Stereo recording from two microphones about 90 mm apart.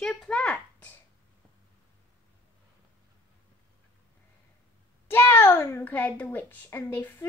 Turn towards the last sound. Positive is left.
turn(degrees=25)  # may be behind; listen again after turning